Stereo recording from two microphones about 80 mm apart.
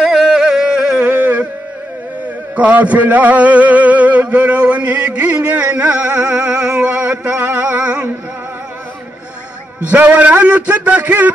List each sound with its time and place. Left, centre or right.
0.0 s carnatic music: centre; by 1.5 s right
2.5 s a sound: centre
9.8 s a man's voice: centre